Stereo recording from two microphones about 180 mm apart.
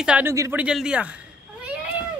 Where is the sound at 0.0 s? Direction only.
5° right (ahead or behind).